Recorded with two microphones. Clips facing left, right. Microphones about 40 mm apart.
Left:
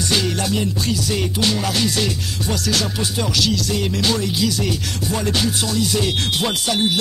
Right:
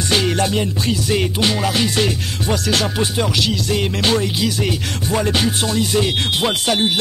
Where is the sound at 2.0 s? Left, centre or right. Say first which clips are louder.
Right 3 dB; right.